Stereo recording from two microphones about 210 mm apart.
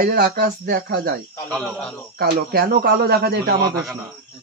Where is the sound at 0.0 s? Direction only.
45° right (ahead or behind).